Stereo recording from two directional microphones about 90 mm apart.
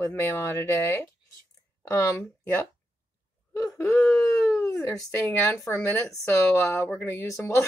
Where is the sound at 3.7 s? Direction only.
35° left (ahead or behind).